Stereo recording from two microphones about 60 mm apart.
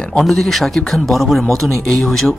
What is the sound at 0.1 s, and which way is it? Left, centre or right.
Speech, centre.